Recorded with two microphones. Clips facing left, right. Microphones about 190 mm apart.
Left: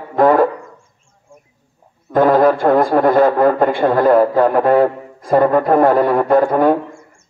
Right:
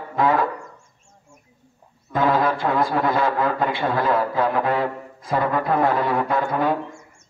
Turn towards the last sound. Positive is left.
turn(degrees=50)  # may be behind; listen again after turning